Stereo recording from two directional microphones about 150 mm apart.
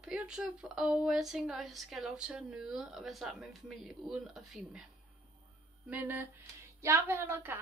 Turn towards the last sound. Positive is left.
turn(degrees=-15)  # may be behind; listen again after turning